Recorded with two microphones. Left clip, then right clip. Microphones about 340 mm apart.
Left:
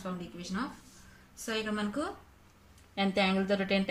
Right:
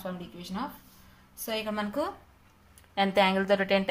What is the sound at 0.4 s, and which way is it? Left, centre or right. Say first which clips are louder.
Speech: right 1 dB; centre.